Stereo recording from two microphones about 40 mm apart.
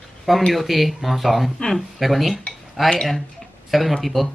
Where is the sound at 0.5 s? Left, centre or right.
Centre.